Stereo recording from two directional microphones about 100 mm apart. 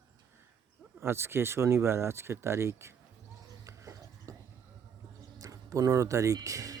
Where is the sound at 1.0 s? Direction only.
25° right (ahead or behind).